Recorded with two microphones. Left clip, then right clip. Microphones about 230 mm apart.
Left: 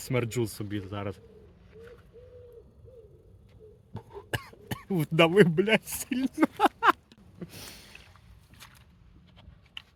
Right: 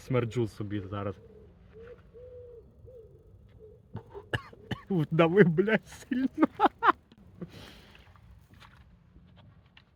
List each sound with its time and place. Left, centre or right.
0.0 s speech: centre
3.9 s cough: centre
6.1 s a sound: centre
8.5 s boat: centre